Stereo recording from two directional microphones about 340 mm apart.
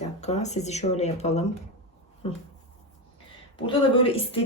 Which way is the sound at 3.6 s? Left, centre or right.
Centre.